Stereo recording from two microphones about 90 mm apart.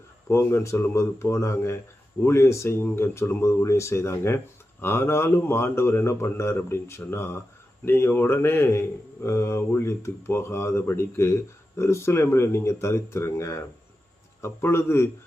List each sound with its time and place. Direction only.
0.3 s a man's voice: 30° left (ahead or behind)